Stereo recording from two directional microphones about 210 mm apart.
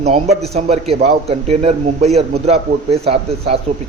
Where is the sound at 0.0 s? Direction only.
30° right (ahead or behind).